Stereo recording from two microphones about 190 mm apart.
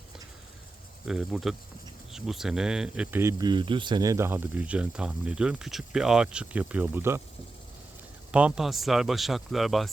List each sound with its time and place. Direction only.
1.0 s speech: centre (ahead or behind)
8.3 s speech: 5° right (ahead or behind)